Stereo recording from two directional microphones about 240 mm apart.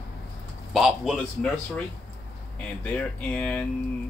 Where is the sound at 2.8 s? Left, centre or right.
Centre.